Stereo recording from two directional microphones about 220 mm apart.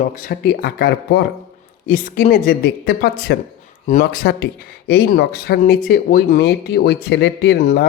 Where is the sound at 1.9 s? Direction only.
40° left (ahead or behind).